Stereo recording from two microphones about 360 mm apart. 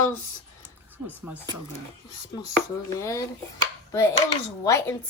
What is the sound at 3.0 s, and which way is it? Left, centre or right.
Speech, centre.